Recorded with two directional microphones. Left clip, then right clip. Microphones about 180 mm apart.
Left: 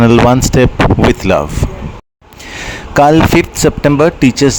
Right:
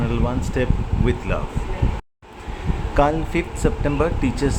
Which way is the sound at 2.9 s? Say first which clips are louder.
Left 12 dB; 60° left (ahead or behind).